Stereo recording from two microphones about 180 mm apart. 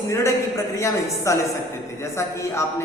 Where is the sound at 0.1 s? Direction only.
15° left (ahead or behind).